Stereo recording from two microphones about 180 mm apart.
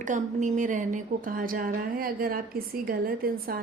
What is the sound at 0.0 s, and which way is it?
A woman's voice, 45° right (ahead or behind).